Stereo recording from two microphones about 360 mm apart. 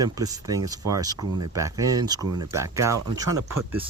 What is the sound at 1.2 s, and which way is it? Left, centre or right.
Speech, right.